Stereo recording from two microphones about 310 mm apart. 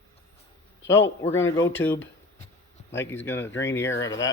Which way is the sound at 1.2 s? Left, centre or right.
Centre.